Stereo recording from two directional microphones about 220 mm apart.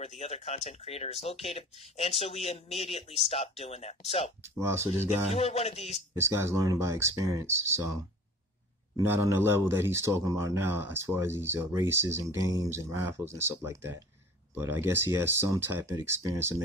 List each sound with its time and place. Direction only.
0.0 s speech: 30° left (ahead or behind)
4.4 s speech: 10° right (ahead or behind)
5.3 s speech: 25° left (ahead or behind)
6.1 s speech: 10° right (ahead or behind)